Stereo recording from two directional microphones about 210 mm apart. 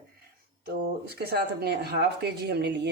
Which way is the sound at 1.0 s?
50° right (ahead or behind).